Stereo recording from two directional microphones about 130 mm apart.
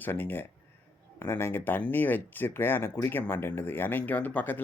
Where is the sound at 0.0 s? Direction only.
15° left (ahead or behind).